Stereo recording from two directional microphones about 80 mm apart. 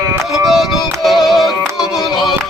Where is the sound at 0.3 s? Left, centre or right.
Centre.